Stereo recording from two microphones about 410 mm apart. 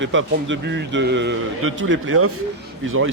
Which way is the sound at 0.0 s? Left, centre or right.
Right.